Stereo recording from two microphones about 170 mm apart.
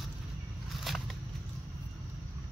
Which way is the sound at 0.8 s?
Centre (ahead or behind).